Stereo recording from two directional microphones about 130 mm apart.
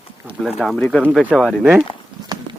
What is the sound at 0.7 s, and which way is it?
Speech, 10° left (ahead or behind).